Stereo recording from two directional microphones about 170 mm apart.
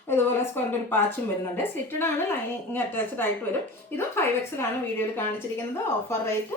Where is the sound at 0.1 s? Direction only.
10° left (ahead or behind).